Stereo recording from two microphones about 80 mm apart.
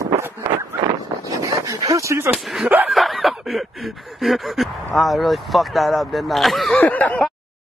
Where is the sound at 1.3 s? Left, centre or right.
Right.